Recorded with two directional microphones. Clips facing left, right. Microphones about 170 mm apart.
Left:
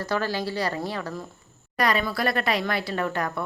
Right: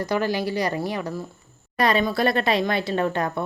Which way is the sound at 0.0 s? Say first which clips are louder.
Right 3 dB; 15° right (ahead or behind).